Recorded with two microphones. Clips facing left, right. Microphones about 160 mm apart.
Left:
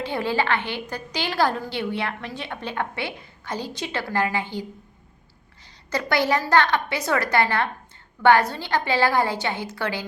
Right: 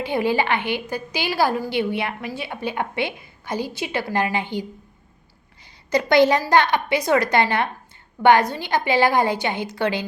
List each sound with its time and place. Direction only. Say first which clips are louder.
0.0 s a woman's voice: right 3 dB; 15° right (ahead or behind)
5.9 s a woman's voice: right 6 dB; 20° right (ahead or behind)